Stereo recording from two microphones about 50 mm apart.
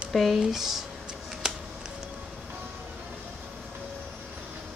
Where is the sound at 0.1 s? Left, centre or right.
Centre.